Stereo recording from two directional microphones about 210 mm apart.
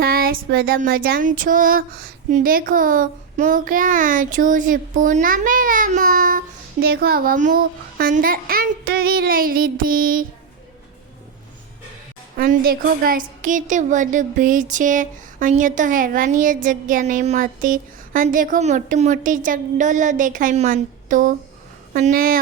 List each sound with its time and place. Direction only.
0.0 s a sound: 45° right (ahead or behind)
2.3 s a woman's voice: 45° right (ahead or behind)
12.4 s a woman's voice: 45° right (ahead or behind)